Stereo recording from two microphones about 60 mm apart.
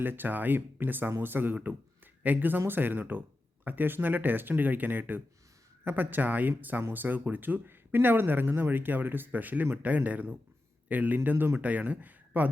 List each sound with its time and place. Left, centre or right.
0.0 s speech: right
11.6 s speech: right